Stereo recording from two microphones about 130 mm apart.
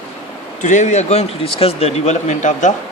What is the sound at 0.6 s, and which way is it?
A man's voice, 70° left (ahead or behind).